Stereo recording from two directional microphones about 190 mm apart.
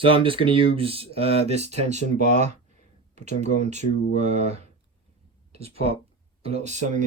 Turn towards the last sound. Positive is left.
turn(degrees=-40)  # may be behind; listen again after turning